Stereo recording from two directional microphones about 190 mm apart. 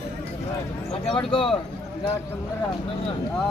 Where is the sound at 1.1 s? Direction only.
25° left (ahead or behind).